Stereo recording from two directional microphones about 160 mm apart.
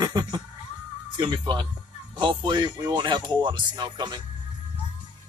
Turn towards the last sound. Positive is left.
turn(degrees=-25)  # may be behind; listen again after turning